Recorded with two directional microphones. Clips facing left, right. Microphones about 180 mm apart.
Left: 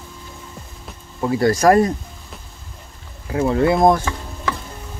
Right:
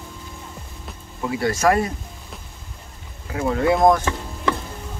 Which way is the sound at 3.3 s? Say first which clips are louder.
Left 3 dB; 30° left (ahead or behind).